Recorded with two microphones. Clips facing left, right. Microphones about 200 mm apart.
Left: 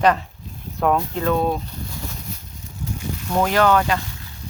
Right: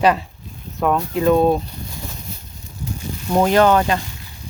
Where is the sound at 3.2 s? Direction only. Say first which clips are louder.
Right 4 dB; 25° right (ahead or behind).